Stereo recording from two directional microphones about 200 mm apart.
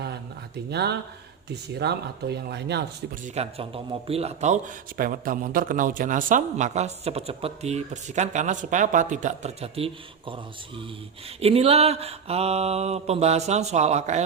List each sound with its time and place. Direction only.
0.7 s speech: 55° right (ahead or behind)
3.2 s speech: 30° right (ahead or behind)